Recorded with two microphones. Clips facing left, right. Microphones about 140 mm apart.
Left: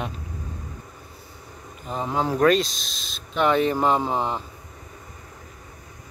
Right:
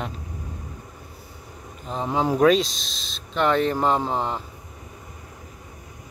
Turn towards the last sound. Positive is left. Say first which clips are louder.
# left 1 dB
turn(degrees=15)  # may be behind; listen again after turning